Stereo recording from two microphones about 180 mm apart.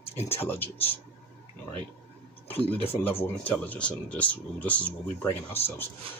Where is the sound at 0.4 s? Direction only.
10° left (ahead or behind).